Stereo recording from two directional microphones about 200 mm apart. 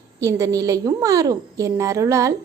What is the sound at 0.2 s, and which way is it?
Speech, 15° right (ahead or behind).